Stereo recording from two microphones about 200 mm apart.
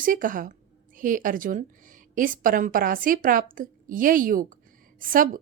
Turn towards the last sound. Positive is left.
turn(degrees=-45)  # may be behind; listen again after turning